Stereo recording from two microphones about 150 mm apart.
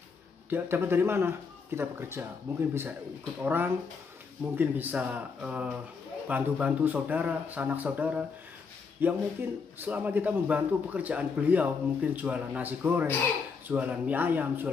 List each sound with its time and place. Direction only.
0.5 s a man's voice: 15° right (ahead or behind)